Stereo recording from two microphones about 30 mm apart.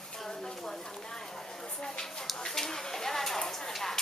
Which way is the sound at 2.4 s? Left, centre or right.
Centre.